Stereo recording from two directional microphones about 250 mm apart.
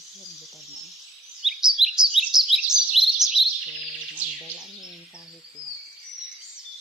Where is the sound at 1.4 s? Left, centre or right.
Centre.